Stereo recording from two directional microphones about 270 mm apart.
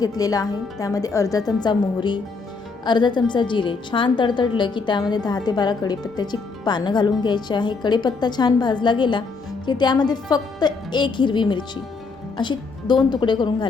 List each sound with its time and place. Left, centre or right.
0.0 s a woman's voice: centre